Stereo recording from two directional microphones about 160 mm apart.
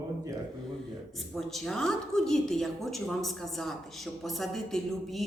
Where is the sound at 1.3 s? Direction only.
Centre (ahead or behind).